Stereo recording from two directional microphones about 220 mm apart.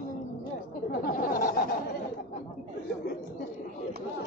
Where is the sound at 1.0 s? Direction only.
40° left (ahead or behind).